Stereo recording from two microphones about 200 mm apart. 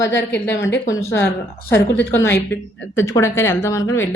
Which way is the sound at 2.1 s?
10° left (ahead or behind).